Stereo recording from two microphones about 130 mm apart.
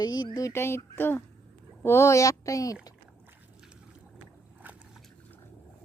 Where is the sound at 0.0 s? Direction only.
35° left (ahead or behind).